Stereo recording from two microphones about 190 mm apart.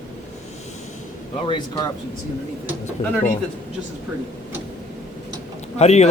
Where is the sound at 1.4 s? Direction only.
25° left (ahead or behind).